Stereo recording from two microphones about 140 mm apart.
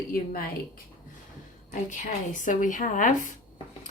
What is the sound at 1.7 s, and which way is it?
A woman's voice, 65° left (ahead or behind).